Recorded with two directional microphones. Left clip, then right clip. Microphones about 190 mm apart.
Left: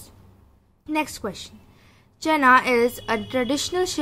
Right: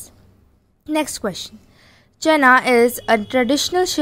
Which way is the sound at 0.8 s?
35° right (ahead or behind).